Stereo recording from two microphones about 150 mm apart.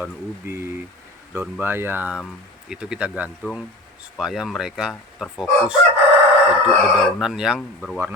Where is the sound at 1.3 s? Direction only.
15° right (ahead or behind).